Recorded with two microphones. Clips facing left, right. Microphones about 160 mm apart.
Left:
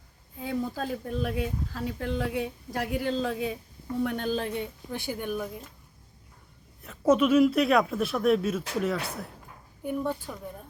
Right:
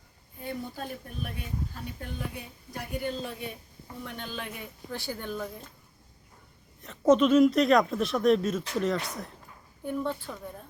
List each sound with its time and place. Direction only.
0.3 s speech: 90° left
4.0 s a woman's voice: 50° left (ahead or behind); by 4.7 s 30° left (ahead or behind)
4.9 s speech: 20° left (ahead or behind)
6.8 s speech: 5° left (ahead or behind)